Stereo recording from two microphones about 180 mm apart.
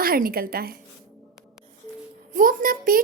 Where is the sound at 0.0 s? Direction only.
55° right (ahead or behind).